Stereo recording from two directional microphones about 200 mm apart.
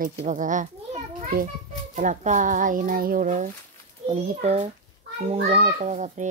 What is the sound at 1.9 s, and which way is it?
A child's voice, 40° right (ahead or behind).